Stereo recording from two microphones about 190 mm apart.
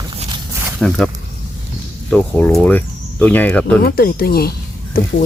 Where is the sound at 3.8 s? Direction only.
50° left (ahead or behind).